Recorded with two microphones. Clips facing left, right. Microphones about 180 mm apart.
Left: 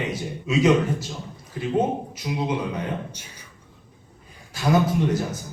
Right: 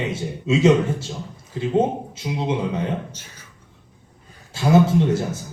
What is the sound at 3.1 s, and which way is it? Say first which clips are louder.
Speech: even; 15° left (ahead or behind).